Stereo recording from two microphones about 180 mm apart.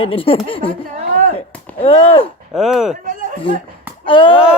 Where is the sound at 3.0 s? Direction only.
50° right (ahead or behind).